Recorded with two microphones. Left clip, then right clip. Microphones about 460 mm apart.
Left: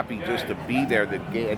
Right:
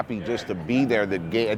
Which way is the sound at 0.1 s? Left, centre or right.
Right.